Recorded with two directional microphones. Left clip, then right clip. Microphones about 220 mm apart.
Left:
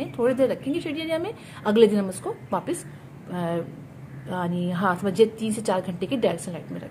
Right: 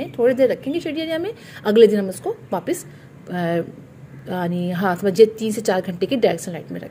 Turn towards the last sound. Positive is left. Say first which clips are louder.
# right 5 dB
turn(degrees=-20)  # may be behind; listen again after turning